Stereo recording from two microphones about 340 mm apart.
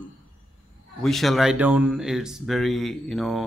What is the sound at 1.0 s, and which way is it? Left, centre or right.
Speech, centre.